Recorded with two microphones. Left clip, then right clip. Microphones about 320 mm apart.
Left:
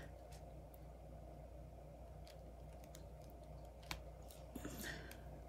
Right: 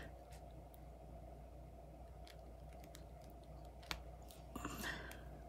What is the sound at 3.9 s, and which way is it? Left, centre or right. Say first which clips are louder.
Typing: right 3 dB; centre.